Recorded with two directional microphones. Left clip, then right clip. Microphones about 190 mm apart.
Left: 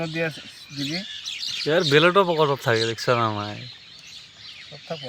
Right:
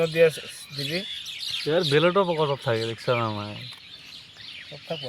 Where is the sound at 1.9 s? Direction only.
25° left (ahead or behind).